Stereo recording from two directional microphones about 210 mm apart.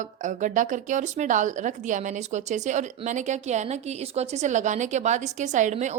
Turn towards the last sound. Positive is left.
turn(degrees=-35)  # may be behind; listen again after turning